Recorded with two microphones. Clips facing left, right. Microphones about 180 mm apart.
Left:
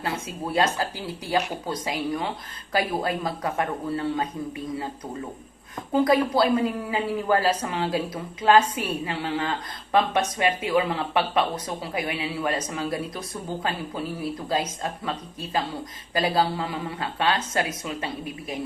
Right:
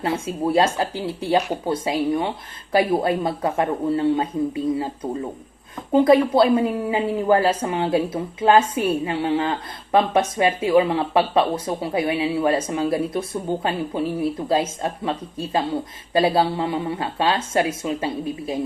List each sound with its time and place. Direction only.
0.0 s a woman's voice: 25° right (ahead or behind)
5.9 s a woman's voice: 25° right (ahead or behind)